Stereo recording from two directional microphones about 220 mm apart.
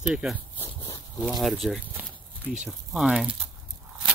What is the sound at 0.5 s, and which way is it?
Dog, 15° left (ahead or behind).